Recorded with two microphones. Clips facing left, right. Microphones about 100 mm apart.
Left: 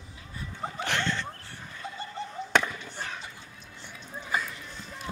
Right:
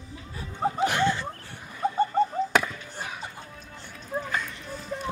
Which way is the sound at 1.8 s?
50° right (ahead or behind).